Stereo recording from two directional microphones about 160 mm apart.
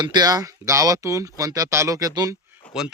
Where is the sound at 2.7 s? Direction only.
5° right (ahead or behind).